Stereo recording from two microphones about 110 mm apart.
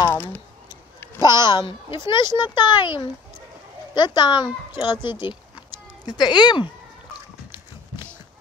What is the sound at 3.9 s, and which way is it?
A child's voice, 40° left (ahead or behind).